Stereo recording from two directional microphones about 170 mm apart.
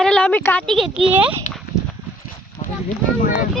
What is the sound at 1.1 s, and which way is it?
Speech, 10° right (ahead or behind).